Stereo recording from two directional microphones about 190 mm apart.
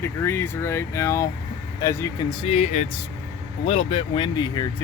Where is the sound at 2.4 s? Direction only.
35° left (ahead or behind).